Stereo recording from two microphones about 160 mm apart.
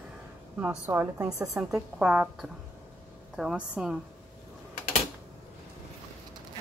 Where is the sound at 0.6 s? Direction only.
10° right (ahead or behind).